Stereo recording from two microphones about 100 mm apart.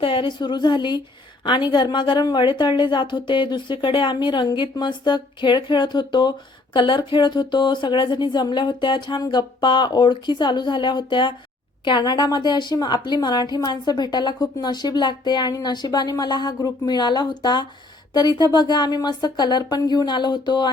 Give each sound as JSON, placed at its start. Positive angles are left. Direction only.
{"t": 0.0, "sound": "a woman's voice", "side_deg": 60}